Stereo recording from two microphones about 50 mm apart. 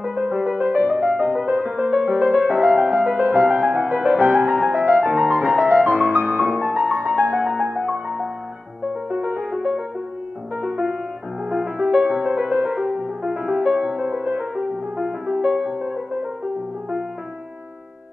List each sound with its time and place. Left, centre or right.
0.2 s music: right
0.9 s music: centre
1.4 s music: right
7.8 s music: centre
9.2 s music: right
11.8 s music: right
14.6 s music: centre